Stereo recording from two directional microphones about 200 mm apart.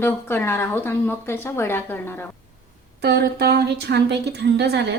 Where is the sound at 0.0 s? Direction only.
10° left (ahead or behind).